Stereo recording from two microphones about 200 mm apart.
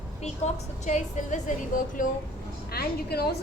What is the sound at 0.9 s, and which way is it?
Speech, 35° left (ahead or behind).